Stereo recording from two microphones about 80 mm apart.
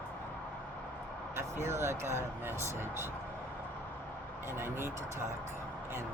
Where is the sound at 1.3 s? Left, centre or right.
Right.